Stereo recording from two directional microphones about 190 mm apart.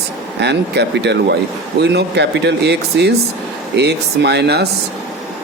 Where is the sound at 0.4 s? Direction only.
65° right (ahead or behind).